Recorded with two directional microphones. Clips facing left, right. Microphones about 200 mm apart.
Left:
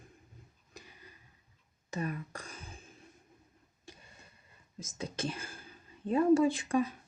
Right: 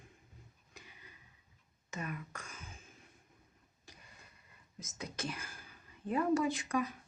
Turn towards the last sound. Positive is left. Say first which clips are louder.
# left 5 dB
turn(degrees=30)  # may be behind; listen again after turning